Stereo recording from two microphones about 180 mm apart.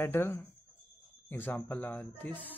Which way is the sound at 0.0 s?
15° left (ahead or behind).